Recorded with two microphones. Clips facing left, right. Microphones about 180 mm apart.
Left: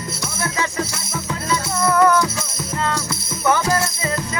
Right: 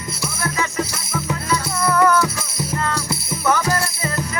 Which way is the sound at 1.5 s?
20° left (ahead or behind).